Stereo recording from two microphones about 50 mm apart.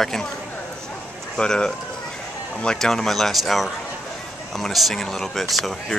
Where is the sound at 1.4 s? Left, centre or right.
Centre.